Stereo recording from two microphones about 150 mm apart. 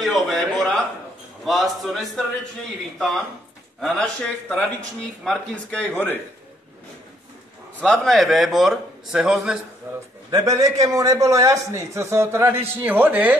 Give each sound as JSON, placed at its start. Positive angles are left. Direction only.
{"t": 0.0, "sound": "a sound", "side_deg": 0}
{"t": 1.4, "sound": "a man's voice", "side_deg": 0}
{"t": 7.8, "sound": "a man's voice", "side_deg": 5}
{"t": 9.9, "sound": "a man's voice", "side_deg": -15}